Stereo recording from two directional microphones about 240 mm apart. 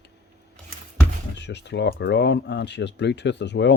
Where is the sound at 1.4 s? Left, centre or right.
Left.